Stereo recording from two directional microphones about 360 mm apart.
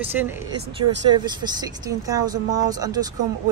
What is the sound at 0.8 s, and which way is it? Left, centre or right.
Speech, right.